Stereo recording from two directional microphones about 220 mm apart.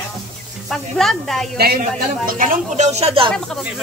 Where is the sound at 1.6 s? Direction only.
40° right (ahead or behind).